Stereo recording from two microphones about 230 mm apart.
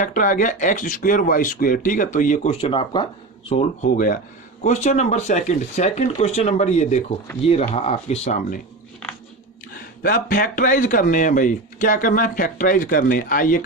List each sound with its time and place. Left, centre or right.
0.0 s speech: left
3.5 s speech: left
9.7 s speech: left